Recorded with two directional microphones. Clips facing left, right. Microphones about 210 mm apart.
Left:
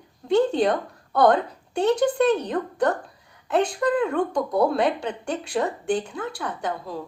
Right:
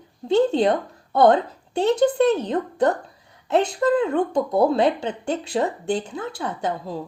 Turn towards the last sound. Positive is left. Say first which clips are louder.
# right 3 dB
turn(degrees=-25)  # may be behind; listen again after turning